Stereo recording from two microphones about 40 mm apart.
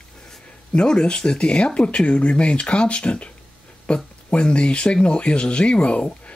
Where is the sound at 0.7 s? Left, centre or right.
Left.